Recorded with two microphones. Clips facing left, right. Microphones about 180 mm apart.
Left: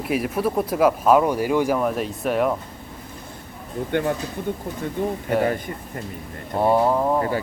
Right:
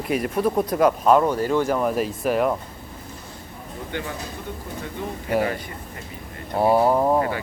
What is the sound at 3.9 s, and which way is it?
Speech, 55° left (ahead or behind).